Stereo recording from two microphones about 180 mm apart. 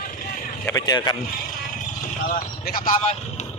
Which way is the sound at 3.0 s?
40° left (ahead or behind).